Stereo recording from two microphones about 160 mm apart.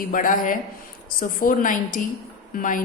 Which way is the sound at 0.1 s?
60° left (ahead or behind).